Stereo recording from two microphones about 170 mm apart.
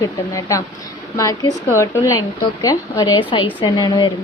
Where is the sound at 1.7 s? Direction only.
15° left (ahead or behind).